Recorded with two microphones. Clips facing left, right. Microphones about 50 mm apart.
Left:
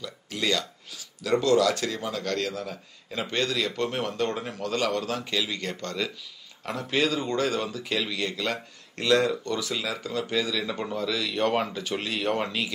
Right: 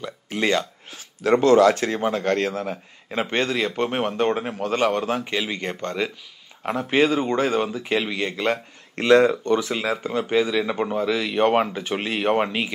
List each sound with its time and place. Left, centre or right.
0.0 s speech: right